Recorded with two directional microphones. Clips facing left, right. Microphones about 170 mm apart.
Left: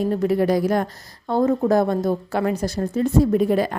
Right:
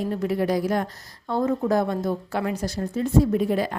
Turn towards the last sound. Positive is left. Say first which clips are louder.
# left 4 dB
turn(degrees=50)  # may be behind; listen again after turning